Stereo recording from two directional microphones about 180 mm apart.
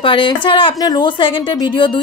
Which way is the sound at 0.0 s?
30° left (ahead or behind).